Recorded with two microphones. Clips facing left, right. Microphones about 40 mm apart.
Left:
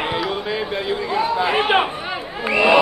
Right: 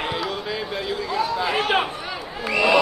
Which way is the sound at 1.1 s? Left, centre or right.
Left.